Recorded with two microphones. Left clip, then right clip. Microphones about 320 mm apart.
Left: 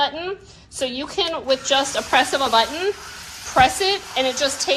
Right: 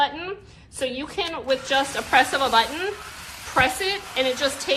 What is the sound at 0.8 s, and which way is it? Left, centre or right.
A woman's voice, centre.